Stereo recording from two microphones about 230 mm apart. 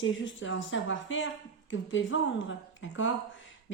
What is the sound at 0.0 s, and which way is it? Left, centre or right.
A woman's voice, left.